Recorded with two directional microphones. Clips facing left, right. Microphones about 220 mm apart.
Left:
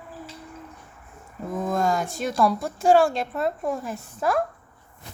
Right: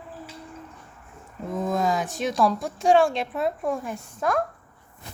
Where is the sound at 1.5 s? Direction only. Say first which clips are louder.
Even; centre (ahead or behind).